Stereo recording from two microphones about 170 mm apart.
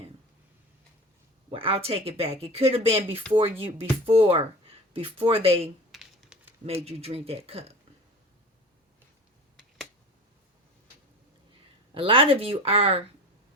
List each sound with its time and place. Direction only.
1.5 s speech: 35° right (ahead or behind)
5.9 s typing: 5° right (ahead or behind)
6.8 s speech: 35° right (ahead or behind)
11.9 s speech: 35° right (ahead or behind)